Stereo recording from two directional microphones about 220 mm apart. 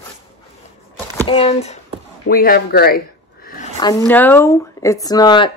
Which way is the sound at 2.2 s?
45° left (ahead or behind).